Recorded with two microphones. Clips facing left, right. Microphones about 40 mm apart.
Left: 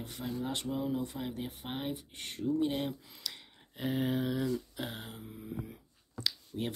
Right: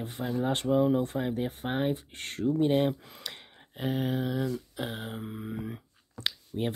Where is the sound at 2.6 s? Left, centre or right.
Right.